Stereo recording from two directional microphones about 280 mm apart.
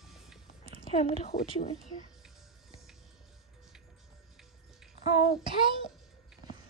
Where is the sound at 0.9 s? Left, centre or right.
Left.